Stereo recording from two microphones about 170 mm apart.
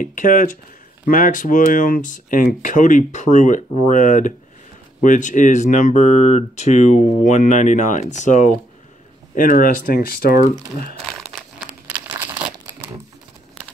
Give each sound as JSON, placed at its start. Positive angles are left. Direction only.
{"t": 0.0, "sound": "speech", "side_deg": 50}